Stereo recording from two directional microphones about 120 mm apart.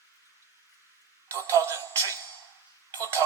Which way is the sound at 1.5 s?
25° right (ahead or behind).